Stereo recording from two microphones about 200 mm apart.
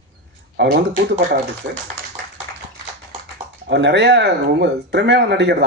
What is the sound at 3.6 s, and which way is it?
Speech, 60° right (ahead or behind).